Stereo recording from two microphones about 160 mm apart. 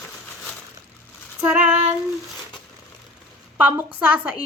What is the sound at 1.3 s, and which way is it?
Speech, 10° right (ahead or behind).